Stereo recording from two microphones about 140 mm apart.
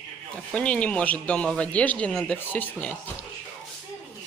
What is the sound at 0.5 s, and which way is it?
Speech, 5° left (ahead or behind).